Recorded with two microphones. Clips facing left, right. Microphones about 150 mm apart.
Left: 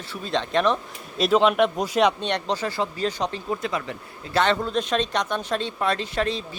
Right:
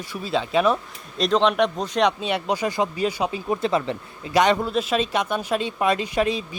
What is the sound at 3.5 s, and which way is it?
Speech, 25° right (ahead or behind).